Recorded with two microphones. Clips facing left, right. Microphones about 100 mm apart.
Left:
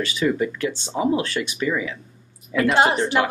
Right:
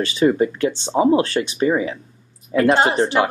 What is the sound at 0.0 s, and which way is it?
Speech, 35° right (ahead or behind).